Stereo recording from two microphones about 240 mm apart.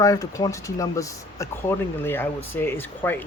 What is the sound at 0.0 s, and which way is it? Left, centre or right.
Speech, centre.